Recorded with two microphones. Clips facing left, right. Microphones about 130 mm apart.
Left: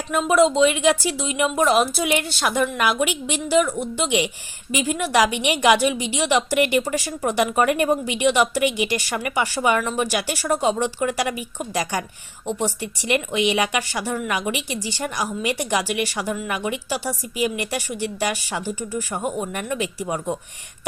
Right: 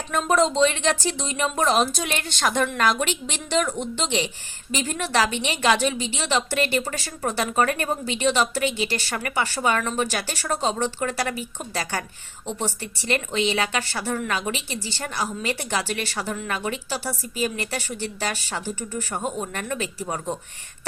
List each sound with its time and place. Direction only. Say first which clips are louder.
0.1 s speech: left 4 dB; 10° left (ahead or behind)